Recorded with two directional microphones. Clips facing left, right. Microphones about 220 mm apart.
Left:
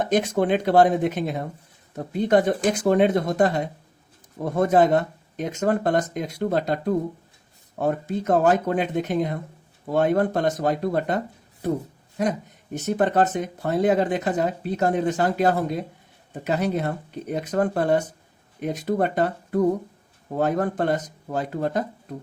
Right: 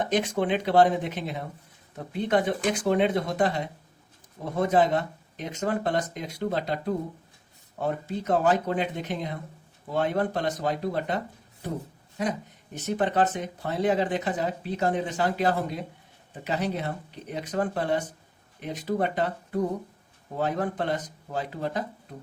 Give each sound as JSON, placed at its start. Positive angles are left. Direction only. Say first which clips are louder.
{"t": 0.0, "sound": "speech", "louder": "left 4 dB", "side_deg": 45}
{"t": 12.7, "sound": "speech", "louder": "left 4 dB", "side_deg": 45}